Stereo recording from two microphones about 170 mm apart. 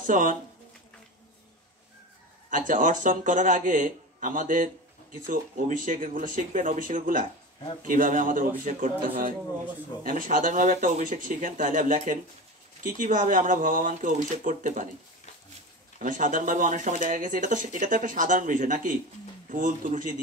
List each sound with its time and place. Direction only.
0.0 s speech: 50° right (ahead or behind)
2.5 s speech: 50° right (ahead or behind)
16.0 s speech: 50° right (ahead or behind)